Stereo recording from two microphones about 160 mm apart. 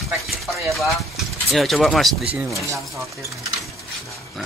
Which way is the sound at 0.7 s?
Centre (ahead or behind).